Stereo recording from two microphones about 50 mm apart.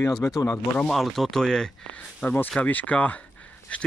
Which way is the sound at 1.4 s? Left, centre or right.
Centre.